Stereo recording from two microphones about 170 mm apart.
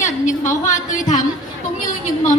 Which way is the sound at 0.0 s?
45° left (ahead or behind).